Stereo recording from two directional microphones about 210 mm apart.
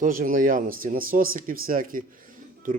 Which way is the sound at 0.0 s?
40° right (ahead or behind).